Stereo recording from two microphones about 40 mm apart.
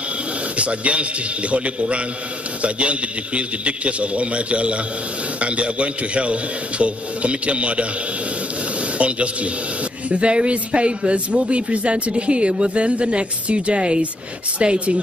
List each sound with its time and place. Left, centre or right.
0.6 s a man's voice: right
8.9 s a man's voice: right